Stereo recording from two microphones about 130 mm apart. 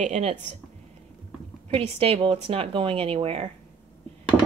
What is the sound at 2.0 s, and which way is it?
Speech, 50° right (ahead or behind).